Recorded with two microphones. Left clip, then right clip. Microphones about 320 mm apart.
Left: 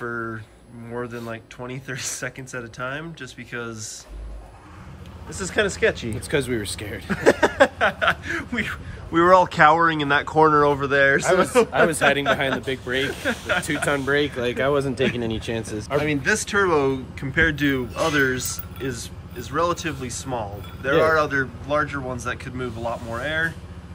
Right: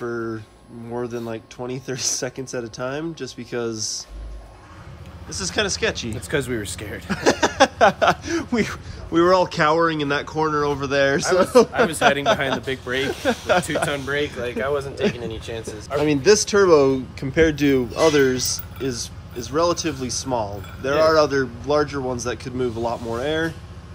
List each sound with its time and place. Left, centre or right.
0.0 s a sound: centre
0.9 s speech: centre
5.3 s speech: centre
13.8 s speech: centre
14.6 s speech: left
16.0 s speech: centre